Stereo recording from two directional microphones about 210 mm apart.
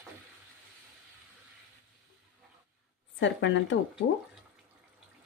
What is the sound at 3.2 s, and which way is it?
Speech, 60° left (ahead or behind).